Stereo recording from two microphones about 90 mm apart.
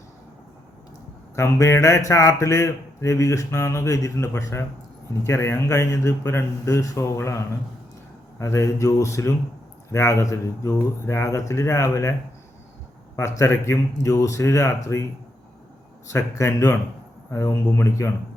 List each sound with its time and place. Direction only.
1.4 s speech: 30° left (ahead or behind)
13.1 s speech: 35° left (ahead or behind)
16.1 s speech: 35° left (ahead or behind)
17.7 s speech: 35° left (ahead or behind)